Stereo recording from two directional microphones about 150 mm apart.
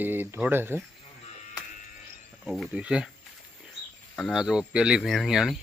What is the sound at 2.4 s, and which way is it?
Speech, centre (ahead or behind).